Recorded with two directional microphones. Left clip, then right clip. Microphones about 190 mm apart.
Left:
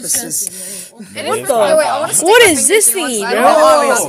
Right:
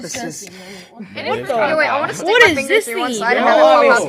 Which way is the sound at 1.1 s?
45° left (ahead or behind).